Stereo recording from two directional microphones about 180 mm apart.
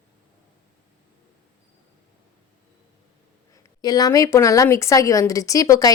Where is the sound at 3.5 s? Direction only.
20° left (ahead or behind).